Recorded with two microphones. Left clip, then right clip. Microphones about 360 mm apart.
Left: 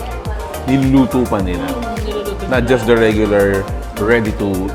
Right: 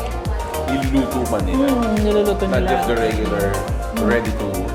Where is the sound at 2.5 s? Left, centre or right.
Left.